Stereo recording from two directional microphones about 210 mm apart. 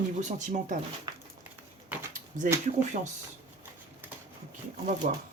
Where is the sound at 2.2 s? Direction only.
40° right (ahead or behind).